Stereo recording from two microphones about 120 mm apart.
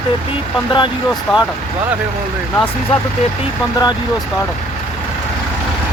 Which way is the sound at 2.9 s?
55° left (ahead or behind).